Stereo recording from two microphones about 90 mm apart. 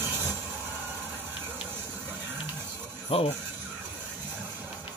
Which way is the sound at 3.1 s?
90° left.